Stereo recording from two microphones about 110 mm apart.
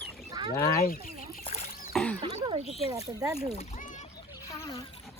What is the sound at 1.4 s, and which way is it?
Rowboat, 65° left (ahead or behind).